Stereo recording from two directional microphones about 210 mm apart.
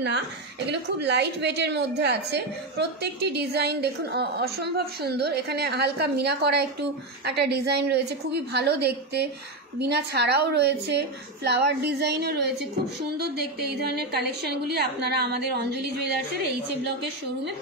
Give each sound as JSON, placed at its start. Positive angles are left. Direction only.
{"t": 0.7, "sound": "a woman's voice", "side_deg": -55}